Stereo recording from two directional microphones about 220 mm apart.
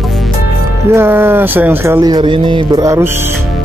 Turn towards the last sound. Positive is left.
turn(degrees=-15)  # may be behind; listen again after turning